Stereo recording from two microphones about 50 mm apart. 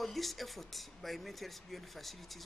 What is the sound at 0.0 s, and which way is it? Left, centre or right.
A man's voice, centre.